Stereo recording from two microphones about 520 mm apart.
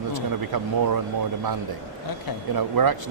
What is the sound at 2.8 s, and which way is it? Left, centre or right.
Speech, right.